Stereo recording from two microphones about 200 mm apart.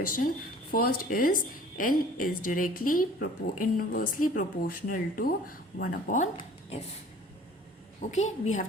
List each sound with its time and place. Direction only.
0.7 s a woman's voice: 45° left (ahead or behind)
8.1 s a woman's voice: 35° left (ahead or behind)